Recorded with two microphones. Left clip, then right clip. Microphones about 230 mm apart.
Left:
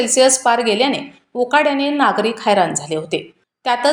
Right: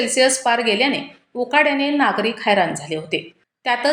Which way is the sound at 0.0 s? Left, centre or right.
Centre.